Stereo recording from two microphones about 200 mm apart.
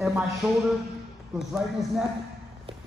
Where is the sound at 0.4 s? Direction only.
Centre (ahead or behind).